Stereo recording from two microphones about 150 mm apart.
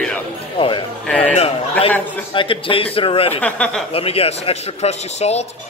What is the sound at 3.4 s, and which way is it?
Speech, 10° left (ahead or behind).